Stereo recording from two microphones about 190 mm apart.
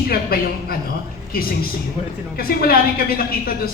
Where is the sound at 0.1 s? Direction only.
50° left (ahead or behind).